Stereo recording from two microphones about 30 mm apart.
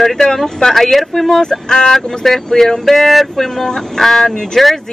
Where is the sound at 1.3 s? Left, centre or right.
Left.